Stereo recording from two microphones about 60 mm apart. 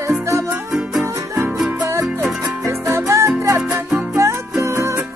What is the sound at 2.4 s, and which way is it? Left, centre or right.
Music, right.